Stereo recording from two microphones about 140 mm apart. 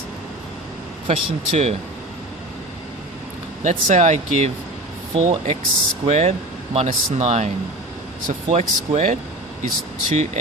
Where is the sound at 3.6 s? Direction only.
60° right (ahead or behind).